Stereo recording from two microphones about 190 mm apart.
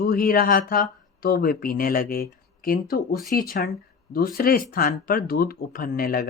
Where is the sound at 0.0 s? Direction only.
50° left (ahead or behind).